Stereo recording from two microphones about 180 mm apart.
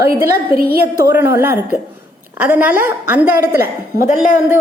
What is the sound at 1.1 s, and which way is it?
A woman's voice, 10° right (ahead or behind).